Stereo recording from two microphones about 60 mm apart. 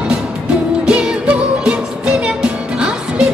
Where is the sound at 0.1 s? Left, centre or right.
Centre.